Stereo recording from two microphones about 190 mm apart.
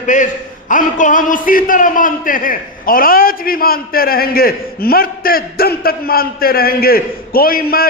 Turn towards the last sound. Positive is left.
turn(degrees=50)  # may be behind; listen again after turning